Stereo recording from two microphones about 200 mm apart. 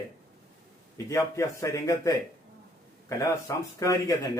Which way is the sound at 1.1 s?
15° left (ahead or behind).